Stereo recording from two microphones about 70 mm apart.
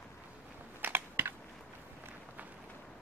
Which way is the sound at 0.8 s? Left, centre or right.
Right.